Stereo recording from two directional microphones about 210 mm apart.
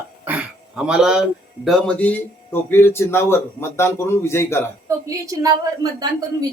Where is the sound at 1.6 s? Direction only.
Centre (ahead or behind).